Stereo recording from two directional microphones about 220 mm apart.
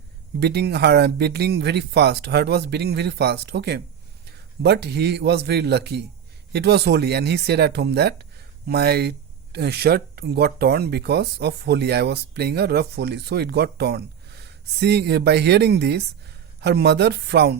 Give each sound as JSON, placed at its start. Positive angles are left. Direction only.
{"t": 0.3, "sound": "speech", "side_deg": -50}